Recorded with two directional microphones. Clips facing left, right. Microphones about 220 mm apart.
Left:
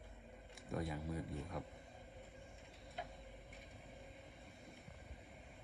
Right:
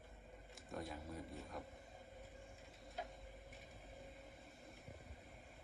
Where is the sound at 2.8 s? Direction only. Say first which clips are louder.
Even; centre (ahead or behind).